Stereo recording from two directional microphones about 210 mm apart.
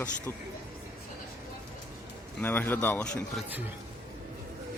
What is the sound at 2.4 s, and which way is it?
A man's voice, 10° left (ahead or behind).